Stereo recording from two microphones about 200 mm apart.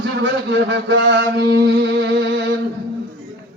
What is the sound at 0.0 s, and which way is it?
Mantra, 65° right (ahead or behind).